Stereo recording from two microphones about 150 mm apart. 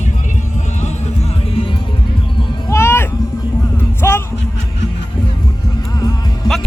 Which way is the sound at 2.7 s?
15° left (ahead or behind).